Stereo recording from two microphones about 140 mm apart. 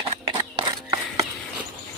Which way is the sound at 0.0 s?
35° right (ahead or behind).